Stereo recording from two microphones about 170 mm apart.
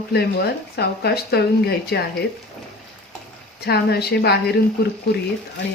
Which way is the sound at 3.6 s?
70° left (ahead or behind).